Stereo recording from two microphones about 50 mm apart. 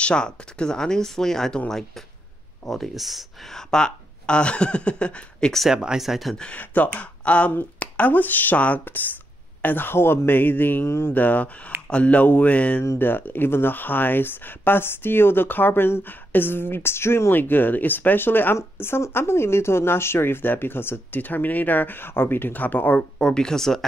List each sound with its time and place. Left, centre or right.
0.0 s speech: centre
3.5 s speech: centre
5.7 s speech: centre
6.5 s speech: left
10.9 s speech: left
11.1 s speech: left
13.0 s speech: left
17.3 s speech: left
18.8 s speech: left
21.2 s speech: left
22.9 s speech: centre